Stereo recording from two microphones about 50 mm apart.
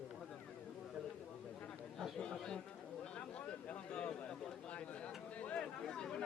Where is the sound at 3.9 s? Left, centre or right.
Centre.